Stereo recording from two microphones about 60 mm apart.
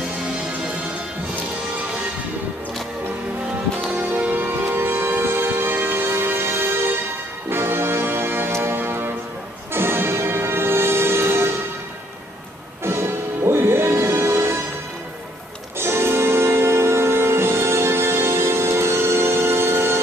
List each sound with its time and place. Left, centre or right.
3.9 s music: right
12.8 s music: right
15.8 s music: right